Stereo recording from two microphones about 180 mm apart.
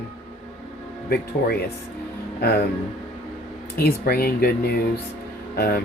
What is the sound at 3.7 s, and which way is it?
Speech, 55° left (ahead or behind).